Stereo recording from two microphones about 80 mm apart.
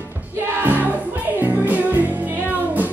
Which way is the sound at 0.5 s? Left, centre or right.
Right.